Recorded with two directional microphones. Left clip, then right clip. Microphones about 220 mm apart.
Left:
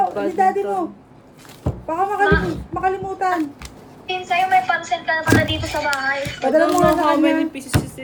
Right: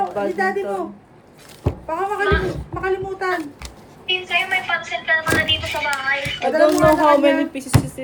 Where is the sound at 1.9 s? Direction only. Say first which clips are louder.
Left 3 dB; 40° left (ahead or behind).